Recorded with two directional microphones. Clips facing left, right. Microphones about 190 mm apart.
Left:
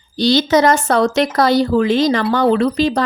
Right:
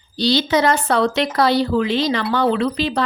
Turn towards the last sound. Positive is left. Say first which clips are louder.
# left 5 dB
turn(degrees=45)  # may be behind; listen again after turning